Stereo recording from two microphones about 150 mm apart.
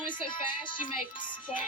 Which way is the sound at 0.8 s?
60° left (ahead or behind).